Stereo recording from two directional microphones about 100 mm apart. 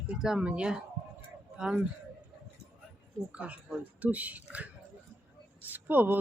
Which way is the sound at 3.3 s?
15° right (ahead or behind).